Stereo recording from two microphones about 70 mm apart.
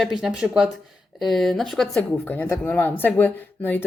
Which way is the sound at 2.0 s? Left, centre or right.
Left.